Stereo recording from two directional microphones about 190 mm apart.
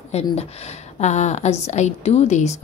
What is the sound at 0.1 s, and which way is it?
A woman's voice, 35° left (ahead or behind).